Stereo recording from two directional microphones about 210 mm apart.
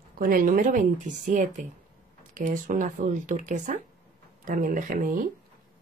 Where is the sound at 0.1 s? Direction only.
45° right (ahead or behind).